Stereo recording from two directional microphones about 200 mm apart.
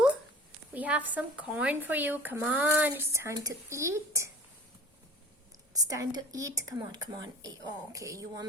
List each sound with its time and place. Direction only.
0.7 s speech: 5° right (ahead or behind)
5.7 s speech: 15° right (ahead or behind)